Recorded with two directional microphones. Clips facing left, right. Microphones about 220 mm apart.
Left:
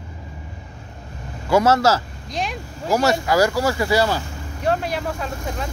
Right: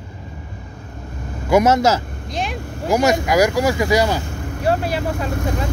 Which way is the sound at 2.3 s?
Centre (ahead or behind).